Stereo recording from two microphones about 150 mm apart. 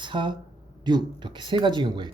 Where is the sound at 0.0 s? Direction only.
30° right (ahead or behind).